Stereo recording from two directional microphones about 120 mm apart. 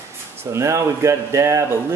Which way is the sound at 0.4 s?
25° right (ahead or behind).